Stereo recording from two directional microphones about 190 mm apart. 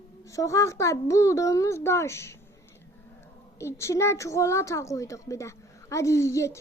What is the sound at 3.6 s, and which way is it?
A woman's voice, 15° left (ahead or behind).